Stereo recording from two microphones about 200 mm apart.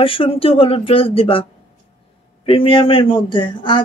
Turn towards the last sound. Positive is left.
turn(degrees=25)  # may be behind; listen again after turning